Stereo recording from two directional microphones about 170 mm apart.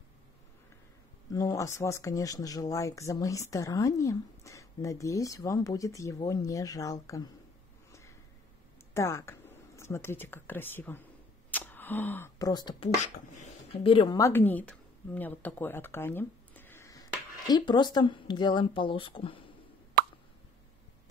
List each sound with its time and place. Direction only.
1.3 s speech: 20° left (ahead or behind)
8.9 s speech: 15° left (ahead or behind)
13.0 s speech: 45° left (ahead or behind)
13.9 s speech: 25° left (ahead or behind)